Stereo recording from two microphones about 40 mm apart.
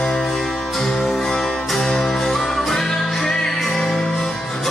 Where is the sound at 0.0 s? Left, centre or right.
Centre.